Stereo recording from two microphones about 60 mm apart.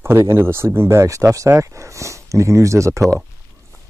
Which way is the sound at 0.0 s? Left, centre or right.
Right.